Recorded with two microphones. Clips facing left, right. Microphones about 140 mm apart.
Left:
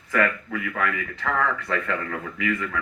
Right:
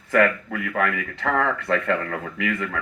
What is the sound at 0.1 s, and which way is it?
A man's voice, 55° right (ahead or behind).